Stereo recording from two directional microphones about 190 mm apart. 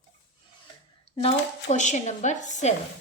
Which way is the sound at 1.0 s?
30° left (ahead or behind).